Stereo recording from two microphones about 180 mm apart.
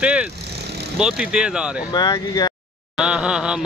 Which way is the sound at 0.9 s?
5° right (ahead or behind).